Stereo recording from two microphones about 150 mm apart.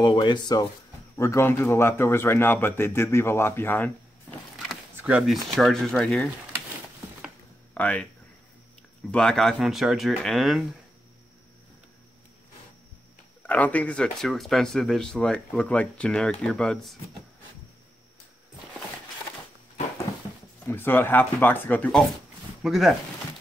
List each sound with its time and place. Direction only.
0.0 s a man's voice: 30° left (ahead or behind); by 3.9 s 15° left (ahead or behind)
5.0 s speech: 5° right (ahead or behind)
7.7 s speech: 10° left (ahead or behind)
9.1 s speech: 5° left (ahead or behind)
13.4 s speech: 10° left (ahead or behind)
20.6 s a man's voice: 15° left (ahead or behind)
22.6 s speech: centre (ahead or behind)